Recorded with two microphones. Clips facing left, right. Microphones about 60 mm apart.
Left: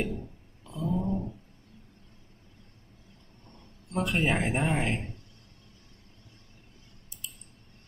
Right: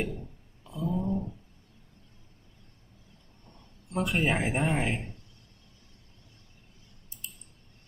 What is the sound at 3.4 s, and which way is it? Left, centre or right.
Speech, centre.